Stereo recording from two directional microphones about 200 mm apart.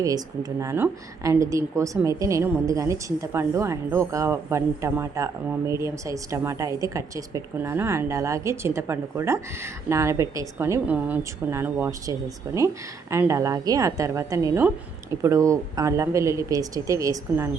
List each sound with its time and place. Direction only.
0.6 s a woman's voice: 15° right (ahead or behind)